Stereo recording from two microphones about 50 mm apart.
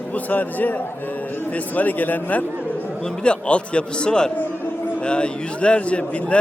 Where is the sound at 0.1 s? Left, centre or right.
Left.